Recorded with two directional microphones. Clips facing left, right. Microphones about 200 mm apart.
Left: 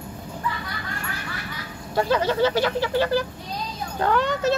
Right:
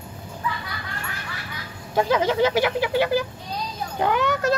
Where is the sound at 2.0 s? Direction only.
10° right (ahead or behind).